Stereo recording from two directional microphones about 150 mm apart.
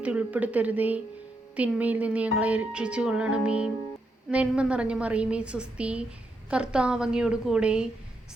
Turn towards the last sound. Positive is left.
turn(degrees=-5)  # may be behind; listen again after turning